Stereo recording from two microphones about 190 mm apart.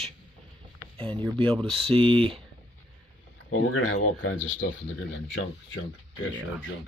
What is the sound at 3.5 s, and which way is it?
Speech, 90° left.